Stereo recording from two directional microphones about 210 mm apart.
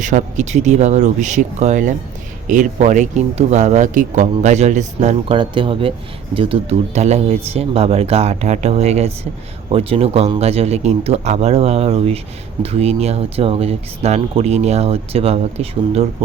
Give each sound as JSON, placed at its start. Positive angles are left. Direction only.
{"t": 0.0, "sound": "speech", "side_deg": -35}